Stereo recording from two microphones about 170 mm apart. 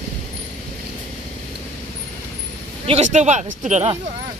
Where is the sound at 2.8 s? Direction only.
40° right (ahead or behind).